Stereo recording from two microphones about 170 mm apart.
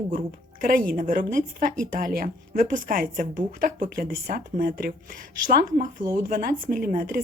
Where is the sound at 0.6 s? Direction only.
55° right (ahead or behind).